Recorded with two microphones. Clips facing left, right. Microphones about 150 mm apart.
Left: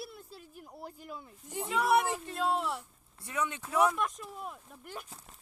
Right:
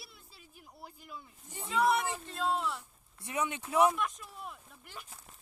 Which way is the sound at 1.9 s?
55° left (ahead or behind).